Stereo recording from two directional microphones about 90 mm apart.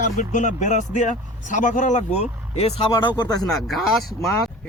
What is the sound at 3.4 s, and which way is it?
Speech, 5° left (ahead or behind).